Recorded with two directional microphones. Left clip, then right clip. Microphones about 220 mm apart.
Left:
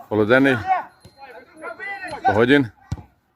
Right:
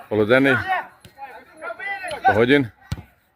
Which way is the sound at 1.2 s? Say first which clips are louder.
Right 2 dB; 45° right (ahead or behind).